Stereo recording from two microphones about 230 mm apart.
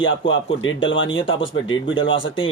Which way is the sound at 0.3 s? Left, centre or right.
Left.